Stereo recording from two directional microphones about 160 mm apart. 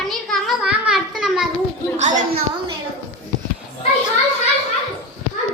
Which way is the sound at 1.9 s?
45° right (ahead or behind).